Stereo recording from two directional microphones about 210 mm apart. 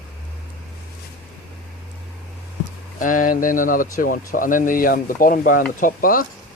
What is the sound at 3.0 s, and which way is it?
Speech, 40° left (ahead or behind).